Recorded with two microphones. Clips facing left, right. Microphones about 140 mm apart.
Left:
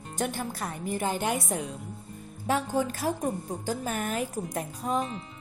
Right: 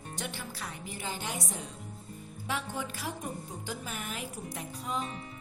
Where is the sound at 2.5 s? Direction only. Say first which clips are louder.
Left 9 dB; 40° left (ahead or behind).